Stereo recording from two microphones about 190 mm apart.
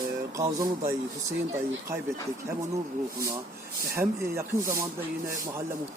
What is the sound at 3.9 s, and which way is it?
Speech, 15° right (ahead or behind).